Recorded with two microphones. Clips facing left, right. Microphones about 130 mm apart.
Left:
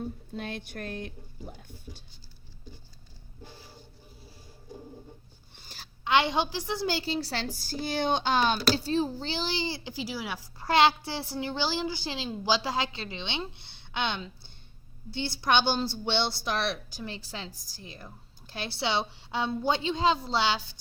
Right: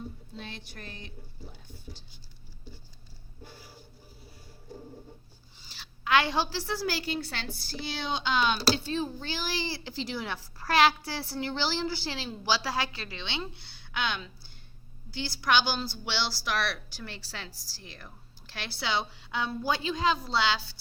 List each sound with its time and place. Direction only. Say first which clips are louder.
0.3 s speech: left 8 dB; 55° left (ahead or behind)
5.5 s a sound: left 2 dB; 50° left (ahead or behind)
6.1 s a woman's voice: left 1 dB; 20° left (ahead or behind)
10.6 s a woman's voice: left 1 dB; 20° left (ahead or behind)